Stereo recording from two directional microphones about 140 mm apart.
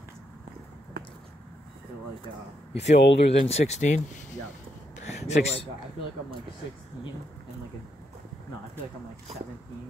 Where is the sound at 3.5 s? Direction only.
50° left (ahead or behind).